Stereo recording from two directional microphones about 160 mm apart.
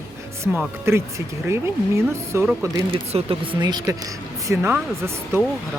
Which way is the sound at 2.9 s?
35° right (ahead or behind).